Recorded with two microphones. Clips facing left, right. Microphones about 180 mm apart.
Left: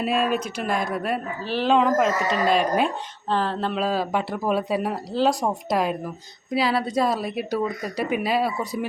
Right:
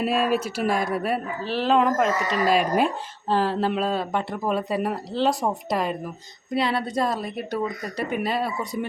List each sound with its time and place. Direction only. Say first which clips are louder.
0.0 s a woman's voice: right 1 dB; centre (ahead or behind)
3.8 s a woman's voice: left 1 dB; 5° left (ahead or behind)